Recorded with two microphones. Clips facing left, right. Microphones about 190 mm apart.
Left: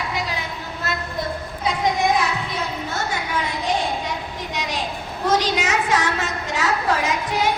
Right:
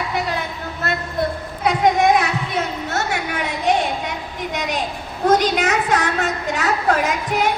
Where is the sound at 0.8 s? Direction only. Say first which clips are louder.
Right 5 dB; 60° right (ahead or behind).